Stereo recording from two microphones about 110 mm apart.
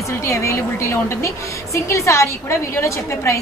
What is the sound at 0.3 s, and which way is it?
A woman's voice, 25° left (ahead or behind).